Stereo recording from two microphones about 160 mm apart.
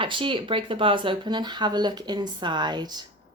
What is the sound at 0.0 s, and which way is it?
Speech, 30° right (ahead or behind).